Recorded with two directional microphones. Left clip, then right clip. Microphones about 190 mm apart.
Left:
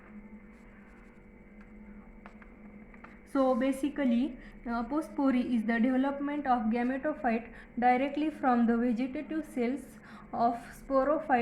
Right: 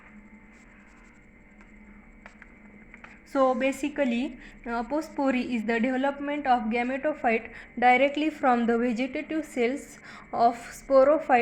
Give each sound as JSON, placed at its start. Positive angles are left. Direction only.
{"t": 3.0, "sound": "a woman's voice", "side_deg": -25}